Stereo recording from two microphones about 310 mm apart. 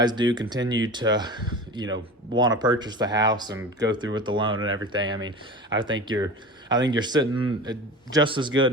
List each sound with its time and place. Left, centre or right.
0.0 s speech: centre
4.5 s speech: right
4.8 s speech: centre